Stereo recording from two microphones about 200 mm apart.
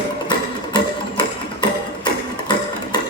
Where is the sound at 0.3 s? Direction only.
20° left (ahead or behind).